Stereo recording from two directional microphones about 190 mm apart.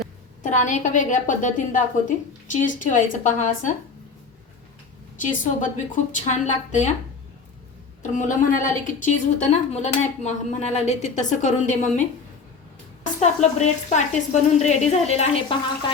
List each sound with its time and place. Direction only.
0.4 s a woman's voice: 40° left (ahead or behind)
5.2 s a woman's voice: 45° left (ahead or behind)
8.0 s a woman's voice: 40° left (ahead or behind)
13.1 s a woman's voice: 35° left (ahead or behind)